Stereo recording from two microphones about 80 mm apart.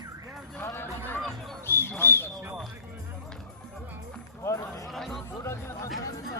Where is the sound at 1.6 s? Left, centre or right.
Left.